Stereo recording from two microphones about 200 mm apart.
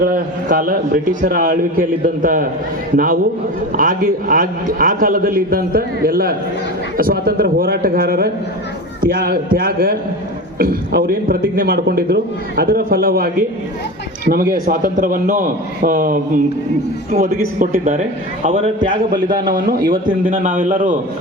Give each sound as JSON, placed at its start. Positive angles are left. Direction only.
{"t": 0.0, "sound": "a man's voice", "side_deg": -45}
{"t": 14.7, "sound": "a man's voice", "side_deg": -45}
{"t": 18.4, "sound": "a man's voice", "side_deg": -30}
{"t": 19.3, "sound": "a man's voice", "side_deg": -45}